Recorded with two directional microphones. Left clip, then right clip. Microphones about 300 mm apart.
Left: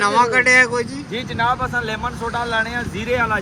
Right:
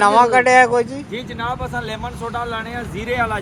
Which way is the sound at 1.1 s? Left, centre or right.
Centre.